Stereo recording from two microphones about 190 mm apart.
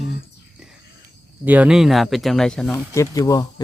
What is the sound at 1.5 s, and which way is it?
Speech, 5° right (ahead or behind).